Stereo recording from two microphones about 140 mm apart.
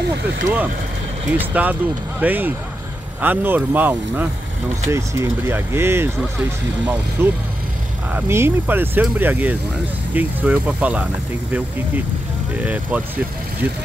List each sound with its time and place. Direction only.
1.3 s speech: 10° right (ahead or behind)
7.2 s speech: 20° right (ahead or behind)
12.6 s speech: 10° right (ahead or behind)